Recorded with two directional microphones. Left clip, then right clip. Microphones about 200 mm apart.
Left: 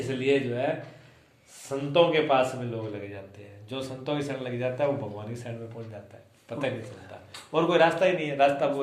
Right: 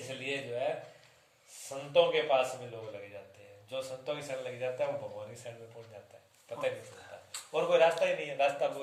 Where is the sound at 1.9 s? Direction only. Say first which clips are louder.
Left 5 dB; centre (ahead or behind).